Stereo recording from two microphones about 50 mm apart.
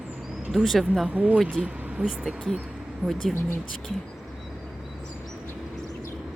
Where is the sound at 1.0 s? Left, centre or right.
Right.